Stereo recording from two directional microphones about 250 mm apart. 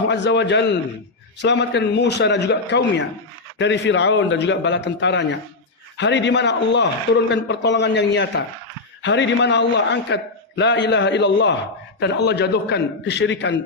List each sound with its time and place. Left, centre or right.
0.1 s a man's voice: left